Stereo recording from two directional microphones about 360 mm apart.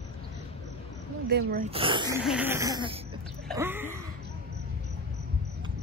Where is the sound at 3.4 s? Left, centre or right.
Centre.